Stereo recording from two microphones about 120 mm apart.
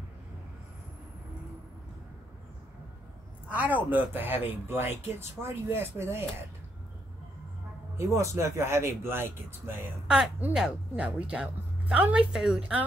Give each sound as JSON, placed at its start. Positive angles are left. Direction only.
{"t": 3.4, "sound": "speech", "side_deg": -15}
{"t": 8.0, "sound": "speech", "side_deg": -25}
{"t": 10.0, "sound": "speech", "side_deg": -5}